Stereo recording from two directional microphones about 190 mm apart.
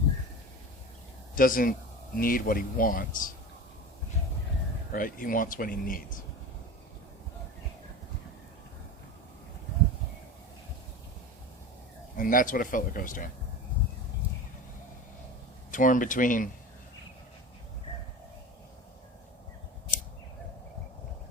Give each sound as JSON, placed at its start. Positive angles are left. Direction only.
{"t": 1.4, "sound": "speech", "side_deg": 45}
{"t": 4.9, "sound": "speech", "side_deg": 45}
{"t": 12.1, "sound": "speech", "side_deg": 45}
{"t": 15.7, "sound": "speech", "side_deg": 45}